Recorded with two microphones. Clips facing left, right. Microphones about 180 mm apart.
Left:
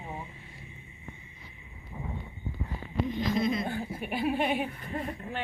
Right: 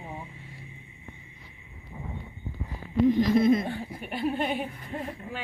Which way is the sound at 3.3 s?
50° right (ahead or behind).